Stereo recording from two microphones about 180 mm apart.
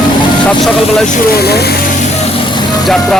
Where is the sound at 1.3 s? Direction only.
60° left (ahead or behind).